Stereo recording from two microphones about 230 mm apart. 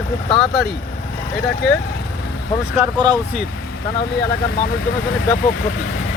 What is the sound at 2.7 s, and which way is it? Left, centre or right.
Speech, centre.